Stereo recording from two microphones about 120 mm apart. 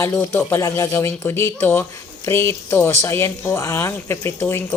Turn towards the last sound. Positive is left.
turn(degrees=20)  # may be behind; listen again after turning